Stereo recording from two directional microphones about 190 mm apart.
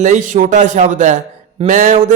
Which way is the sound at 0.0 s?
40° right (ahead or behind).